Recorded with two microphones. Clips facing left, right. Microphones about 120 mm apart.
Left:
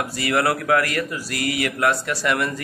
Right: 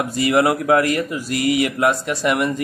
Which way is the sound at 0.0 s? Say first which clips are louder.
Right 5 dB; 20° right (ahead or behind).